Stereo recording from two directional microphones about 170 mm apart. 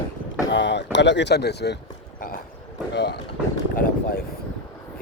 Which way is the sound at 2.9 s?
90° left.